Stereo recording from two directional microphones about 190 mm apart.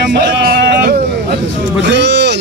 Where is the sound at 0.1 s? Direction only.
55° right (ahead or behind).